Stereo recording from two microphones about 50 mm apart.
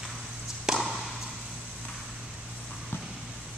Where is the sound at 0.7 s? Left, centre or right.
Centre.